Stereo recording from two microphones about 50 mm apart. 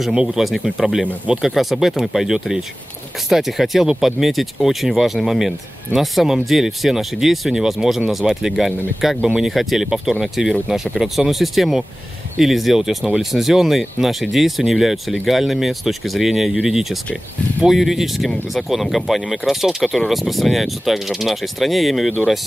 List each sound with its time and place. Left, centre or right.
0.1 s speech: centre